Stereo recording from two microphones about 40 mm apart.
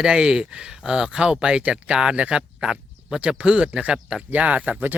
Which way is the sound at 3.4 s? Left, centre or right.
Right.